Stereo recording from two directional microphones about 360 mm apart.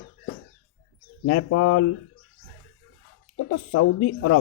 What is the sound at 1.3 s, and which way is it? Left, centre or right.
Speech, left.